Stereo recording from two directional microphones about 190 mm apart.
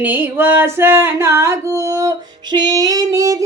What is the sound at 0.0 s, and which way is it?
Female singing, 10° right (ahead or behind).